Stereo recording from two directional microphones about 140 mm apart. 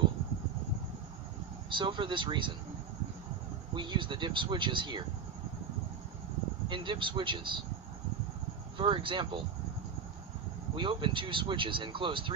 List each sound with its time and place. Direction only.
1.7 s speech: 35° right (ahead or behind)
3.7 s speech: 35° right (ahead or behind)
6.7 s speech: 35° right (ahead or behind)
8.7 s speech: 40° right (ahead or behind)
10.7 s speech: 35° right (ahead or behind)